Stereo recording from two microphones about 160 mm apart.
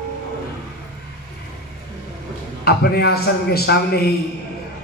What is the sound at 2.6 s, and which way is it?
A man's voice, 75° left (ahead or behind).